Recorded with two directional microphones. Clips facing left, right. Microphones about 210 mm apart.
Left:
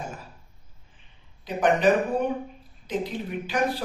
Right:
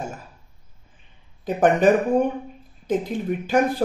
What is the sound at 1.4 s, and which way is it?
Speech, 45° right (ahead or behind).